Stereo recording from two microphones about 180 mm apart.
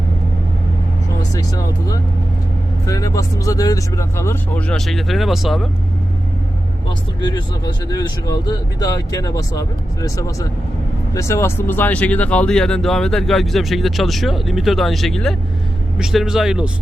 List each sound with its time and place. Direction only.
1.3 s speech: 20° left (ahead or behind); by 5.6 s centre (ahead or behind)
7.9 s speech: 20° left (ahead or behind); by 16.6 s 5° right (ahead or behind)